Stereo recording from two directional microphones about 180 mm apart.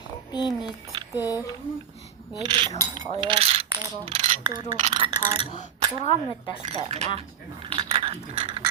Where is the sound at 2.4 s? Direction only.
25° right (ahead or behind).